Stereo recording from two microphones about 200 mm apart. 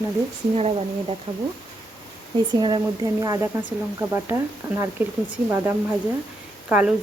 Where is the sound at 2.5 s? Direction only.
25° right (ahead or behind); by 6.9 s 5° right (ahead or behind).